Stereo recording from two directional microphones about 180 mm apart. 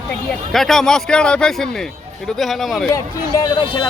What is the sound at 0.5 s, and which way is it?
A man's voice, centre (ahead or behind).